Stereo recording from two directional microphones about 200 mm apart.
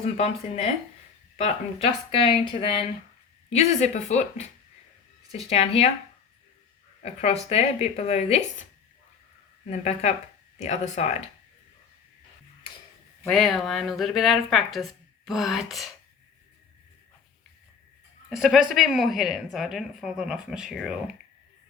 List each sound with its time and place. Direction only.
0.0 s speech: 30° left (ahead or behind)
2.1 s speech: 30° left (ahead or behind)
5.5 s speech: 30° left (ahead or behind)
7.0 s speech: 30° left (ahead or behind)
9.6 s speech: 35° left (ahead or behind)
13.2 s a woman's voice: centre (ahead or behind)
18.3 s a woman's voice: centre (ahead or behind)